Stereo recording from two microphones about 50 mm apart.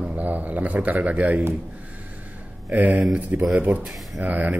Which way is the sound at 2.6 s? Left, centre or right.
Right.